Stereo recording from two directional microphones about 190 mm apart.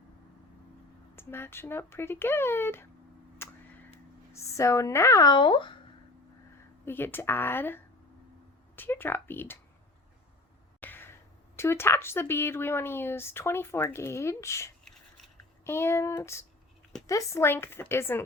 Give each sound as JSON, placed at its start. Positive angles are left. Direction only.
{"t": 1.1, "sound": "a woman's voice", "side_deg": 10}
{"t": 3.4, "sound": "a sound", "side_deg": 15}
{"t": 4.3, "sound": "a woman's voice", "side_deg": 15}
{"t": 6.8, "sound": "a woman's voice", "side_deg": 10}
{"t": 10.8, "sound": "a sound", "side_deg": 10}
{"t": 11.5, "sound": "a woman's voice", "side_deg": 15}